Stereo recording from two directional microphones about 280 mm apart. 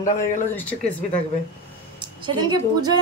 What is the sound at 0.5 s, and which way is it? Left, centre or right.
Speech, centre.